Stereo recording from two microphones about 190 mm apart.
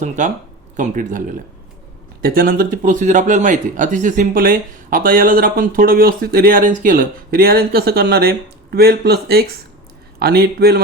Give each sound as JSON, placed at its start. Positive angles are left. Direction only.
{"t": 0.2, "sound": "speech", "side_deg": -40}